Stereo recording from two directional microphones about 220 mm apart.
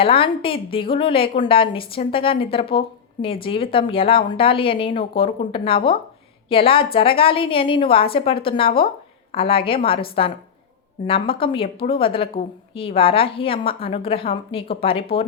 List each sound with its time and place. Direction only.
0.0 s a woman's voice: 25° left (ahead or behind)